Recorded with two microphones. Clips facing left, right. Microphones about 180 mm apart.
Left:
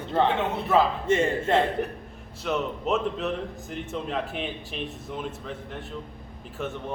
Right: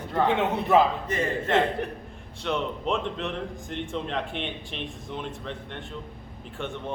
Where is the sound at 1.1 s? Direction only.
25° left (ahead or behind).